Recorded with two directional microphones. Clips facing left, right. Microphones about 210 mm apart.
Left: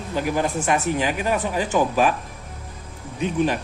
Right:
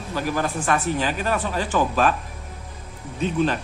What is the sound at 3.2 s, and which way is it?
Speech, 15° left (ahead or behind).